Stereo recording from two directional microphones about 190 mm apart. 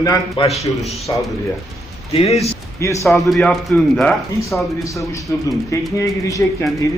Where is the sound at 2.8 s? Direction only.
15° left (ahead or behind).